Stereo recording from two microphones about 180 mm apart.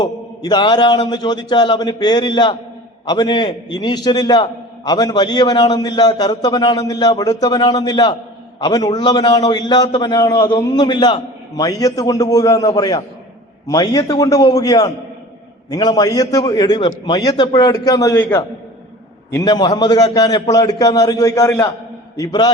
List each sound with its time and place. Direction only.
0.0 s a man's voice: 25° left (ahead or behind)
19.3 s a man's voice: 20° left (ahead or behind)